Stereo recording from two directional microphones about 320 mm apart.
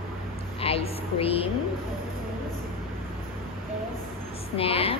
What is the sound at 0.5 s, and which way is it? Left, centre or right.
Speech, centre.